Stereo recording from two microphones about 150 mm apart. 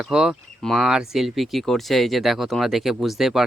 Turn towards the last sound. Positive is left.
turn(degrees=0)  # may be behind; listen again after turning